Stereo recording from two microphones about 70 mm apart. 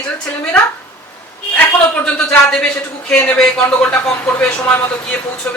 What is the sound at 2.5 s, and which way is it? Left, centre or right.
A man's voice, centre.